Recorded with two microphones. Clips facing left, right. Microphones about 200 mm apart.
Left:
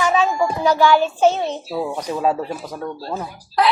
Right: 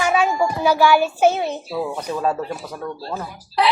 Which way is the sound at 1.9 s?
15° left (ahead or behind).